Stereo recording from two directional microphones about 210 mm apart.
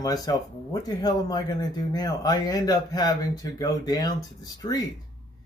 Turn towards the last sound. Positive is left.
turn(degrees=20)  # may be behind; listen again after turning